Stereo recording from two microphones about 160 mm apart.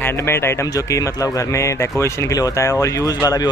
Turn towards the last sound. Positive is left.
turn(degrees=20)  # may be behind; listen again after turning